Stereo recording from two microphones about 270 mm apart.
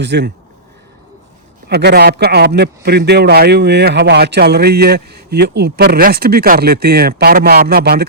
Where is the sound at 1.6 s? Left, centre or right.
Right.